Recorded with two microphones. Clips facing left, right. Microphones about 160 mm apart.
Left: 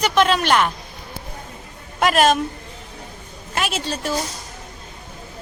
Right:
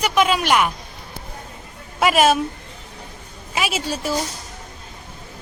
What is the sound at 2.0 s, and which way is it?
Speech, 5° right (ahead or behind).